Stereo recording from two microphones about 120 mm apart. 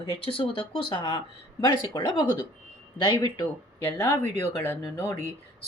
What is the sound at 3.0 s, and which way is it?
Speech, 40° left (ahead or behind).